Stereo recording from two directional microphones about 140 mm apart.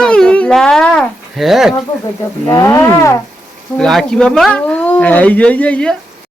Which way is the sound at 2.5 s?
20° left (ahead or behind).